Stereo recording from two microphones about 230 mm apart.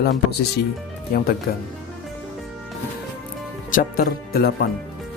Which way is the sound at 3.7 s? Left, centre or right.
Left.